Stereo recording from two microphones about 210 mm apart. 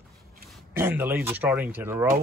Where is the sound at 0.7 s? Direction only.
10° right (ahead or behind).